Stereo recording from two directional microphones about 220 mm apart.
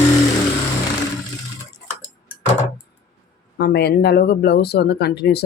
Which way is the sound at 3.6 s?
45° left (ahead or behind).